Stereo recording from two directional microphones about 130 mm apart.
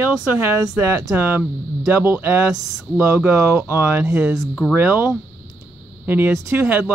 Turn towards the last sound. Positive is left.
turn(degrees=-20)  # may be behind; listen again after turning